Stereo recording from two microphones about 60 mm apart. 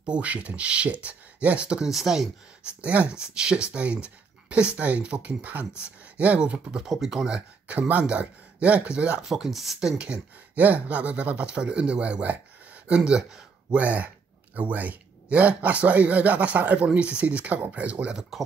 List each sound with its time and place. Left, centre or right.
0.1 s speech: right
1.9 s speech: centre
2.8 s speech: right
6.8 s speech: centre
9.2 s speech: centre
9.8 s speech: centre
13.7 s speech: right
18.3 s speech: centre